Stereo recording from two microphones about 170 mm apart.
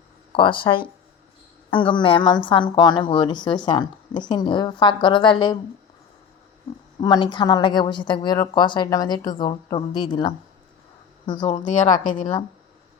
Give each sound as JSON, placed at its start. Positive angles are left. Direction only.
{"t": 0.3, "sound": "a woman's voice", "side_deg": 30}
{"t": 7.0, "sound": "a woman's voice", "side_deg": 25}
{"t": 11.6, "sound": "a woman's voice", "side_deg": 50}
{"t": 12.2, "sound": "a woman's voice", "side_deg": 35}